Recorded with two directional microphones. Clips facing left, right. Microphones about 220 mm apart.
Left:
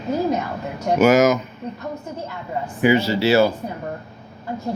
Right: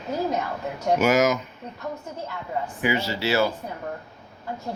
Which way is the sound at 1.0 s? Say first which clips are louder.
Left 7 dB; 50° left (ahead or behind).